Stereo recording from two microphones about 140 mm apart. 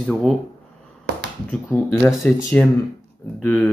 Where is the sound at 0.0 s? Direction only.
Centre (ahead or behind).